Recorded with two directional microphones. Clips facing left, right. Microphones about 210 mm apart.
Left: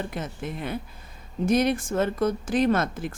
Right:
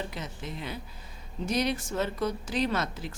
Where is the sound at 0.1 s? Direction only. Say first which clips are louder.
Left 6 dB; 50° left (ahead or behind).